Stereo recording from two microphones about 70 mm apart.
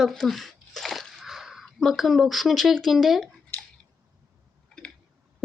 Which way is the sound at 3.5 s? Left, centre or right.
Left.